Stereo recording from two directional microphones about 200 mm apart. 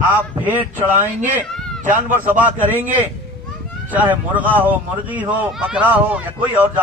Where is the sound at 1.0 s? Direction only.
40° right (ahead or behind).